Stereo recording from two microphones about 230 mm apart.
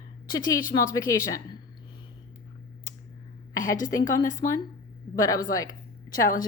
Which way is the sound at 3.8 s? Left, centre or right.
Left.